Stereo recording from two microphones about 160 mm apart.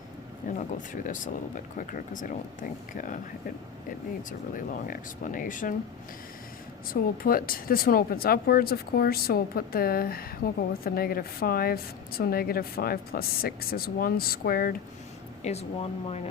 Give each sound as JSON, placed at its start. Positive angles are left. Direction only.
{"t": 0.4, "sound": "a sound", "side_deg": 55}
{"t": 0.9, "sound": "speech", "side_deg": 55}
{"t": 4.3, "sound": "speech", "side_deg": 55}
{"t": 6.8, "sound": "speech", "side_deg": 65}
{"t": 15.4, "sound": "speech", "side_deg": 40}